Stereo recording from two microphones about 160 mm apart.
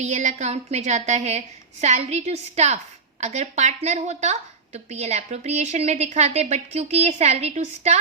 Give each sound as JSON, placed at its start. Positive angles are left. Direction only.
{"t": 0.0, "sound": "a woman's voice", "side_deg": -50}